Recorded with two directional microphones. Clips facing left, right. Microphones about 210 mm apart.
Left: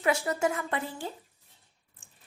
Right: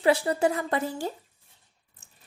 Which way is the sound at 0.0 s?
30° right (ahead or behind).